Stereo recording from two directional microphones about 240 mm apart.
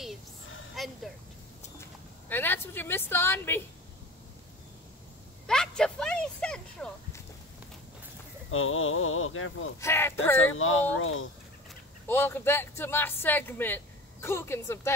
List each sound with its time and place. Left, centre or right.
0.7 s a sound: centre
1.8 s speech: centre
5.5 s a sound: centre
8.5 s speech: left
9.8 s speech: centre
10.4 s speech: left
12.1 s speech: centre